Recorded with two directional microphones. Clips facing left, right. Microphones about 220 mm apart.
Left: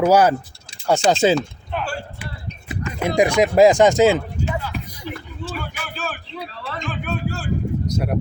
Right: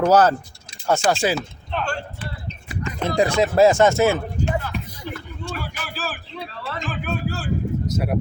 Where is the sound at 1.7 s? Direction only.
5° left (ahead or behind).